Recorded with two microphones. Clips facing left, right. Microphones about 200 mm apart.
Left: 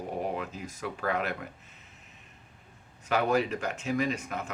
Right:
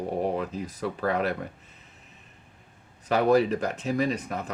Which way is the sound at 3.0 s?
35° right (ahead or behind).